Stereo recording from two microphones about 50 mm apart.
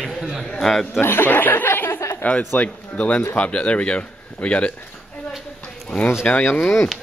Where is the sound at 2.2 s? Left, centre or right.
Left.